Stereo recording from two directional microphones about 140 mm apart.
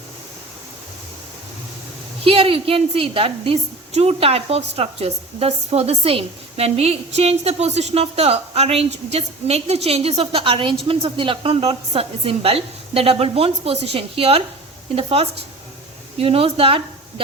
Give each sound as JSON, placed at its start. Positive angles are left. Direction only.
{"t": 2.2, "sound": "a woman's voice", "side_deg": -40}